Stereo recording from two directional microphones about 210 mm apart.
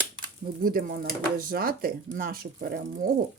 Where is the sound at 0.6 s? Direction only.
45° right (ahead or behind).